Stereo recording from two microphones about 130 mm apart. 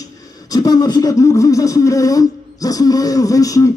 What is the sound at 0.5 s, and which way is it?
Speech, 30° left (ahead or behind).